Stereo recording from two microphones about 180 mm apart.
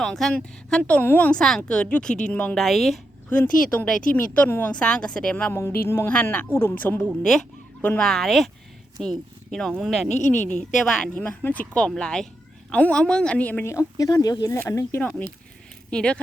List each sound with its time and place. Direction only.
0.0 s a woman's voice: centre (ahead or behind)
10.1 s speech: 40° left (ahead or behind)
10.8 s speech: 5° left (ahead or behind)